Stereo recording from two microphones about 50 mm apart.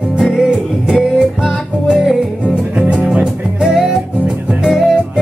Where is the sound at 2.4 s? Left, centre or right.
Right.